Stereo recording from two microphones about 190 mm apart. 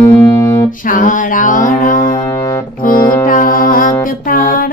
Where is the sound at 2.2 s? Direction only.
15° left (ahead or behind).